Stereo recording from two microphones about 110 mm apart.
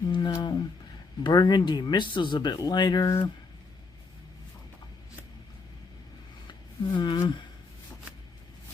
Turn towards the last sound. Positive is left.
turn(degrees=45)  # may be behind; listen again after turning